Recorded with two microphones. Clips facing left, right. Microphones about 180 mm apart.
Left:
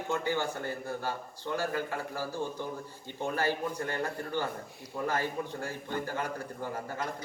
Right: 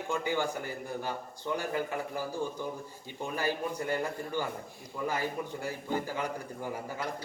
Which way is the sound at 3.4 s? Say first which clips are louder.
Even; 10° right (ahead or behind).